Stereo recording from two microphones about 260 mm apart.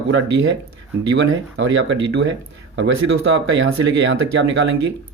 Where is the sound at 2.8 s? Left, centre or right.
Right.